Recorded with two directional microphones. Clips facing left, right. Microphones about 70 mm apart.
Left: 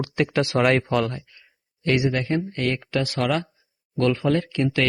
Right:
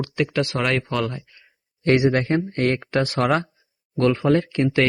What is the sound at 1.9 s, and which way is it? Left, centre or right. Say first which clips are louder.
Speech: right 4 dB; right.